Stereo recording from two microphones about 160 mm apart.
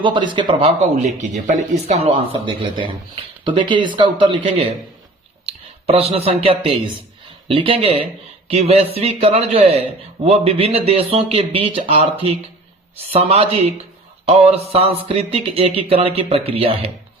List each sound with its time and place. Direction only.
0.0 s speech: 30° right (ahead or behind)
0.9 s speech: 45° right (ahead or behind)
2.6 s speech: 30° right (ahead or behind)